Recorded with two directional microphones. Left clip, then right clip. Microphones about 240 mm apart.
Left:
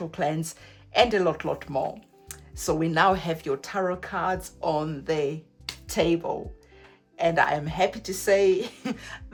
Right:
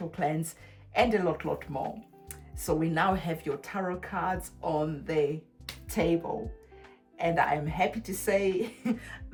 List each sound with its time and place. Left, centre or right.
0.1 s a woman's voice: left